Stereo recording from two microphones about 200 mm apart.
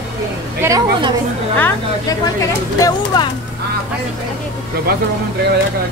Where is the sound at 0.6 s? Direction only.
20° right (ahead or behind).